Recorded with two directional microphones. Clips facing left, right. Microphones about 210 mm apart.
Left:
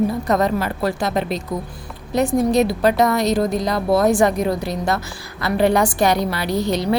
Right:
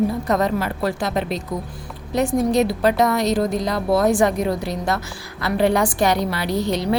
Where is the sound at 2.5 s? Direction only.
40° left (ahead or behind).